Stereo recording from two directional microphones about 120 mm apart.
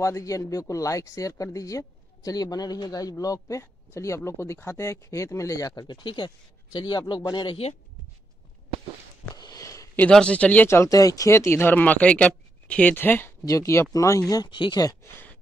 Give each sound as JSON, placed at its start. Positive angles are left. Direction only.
{"t": 0.0, "sound": "speech", "side_deg": 25}
{"t": 9.3, "sound": "sniff", "side_deg": 30}
{"t": 9.9, "sound": "speech", "side_deg": 10}
{"t": 14.3, "sound": "speech", "side_deg": 40}